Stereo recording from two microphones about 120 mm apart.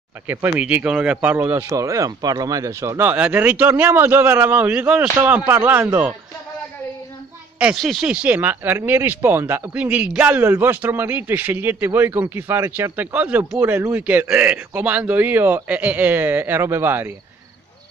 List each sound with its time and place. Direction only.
0.3 s speech: 15° right (ahead or behind)
7.5 s a woman's voice: 5° right (ahead or behind)
8.1 s speech: 10° right (ahead or behind)